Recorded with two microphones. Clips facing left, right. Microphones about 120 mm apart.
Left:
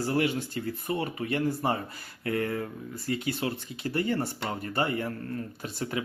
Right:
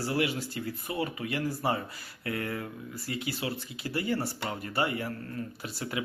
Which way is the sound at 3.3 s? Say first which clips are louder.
Left 3 dB; 55° left (ahead or behind).